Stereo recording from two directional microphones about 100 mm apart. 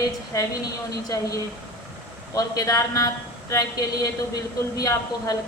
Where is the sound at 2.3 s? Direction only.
35° left (ahead or behind).